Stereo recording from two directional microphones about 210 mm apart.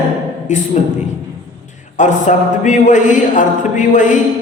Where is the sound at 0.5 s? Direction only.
35° left (ahead or behind).